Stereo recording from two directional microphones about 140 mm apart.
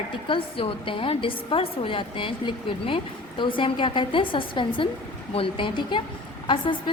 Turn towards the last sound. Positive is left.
turn(degrees=35)  # may be behind; listen again after turning